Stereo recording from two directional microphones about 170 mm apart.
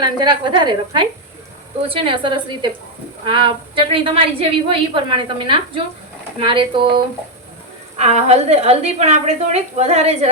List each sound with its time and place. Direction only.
0.0 s a woman's voice: 25° right (ahead or behind)
7.9 s speech: 40° right (ahead or behind)